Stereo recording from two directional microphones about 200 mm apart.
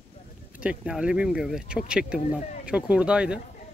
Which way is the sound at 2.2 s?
35° left (ahead or behind).